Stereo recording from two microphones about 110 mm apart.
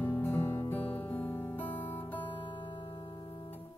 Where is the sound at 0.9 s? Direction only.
15° left (ahead or behind).